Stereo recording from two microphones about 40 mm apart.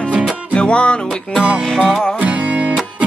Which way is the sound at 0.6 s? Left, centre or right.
Left.